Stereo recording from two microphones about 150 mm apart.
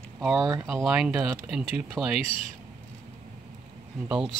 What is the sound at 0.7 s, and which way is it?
Speech, centre (ahead or behind).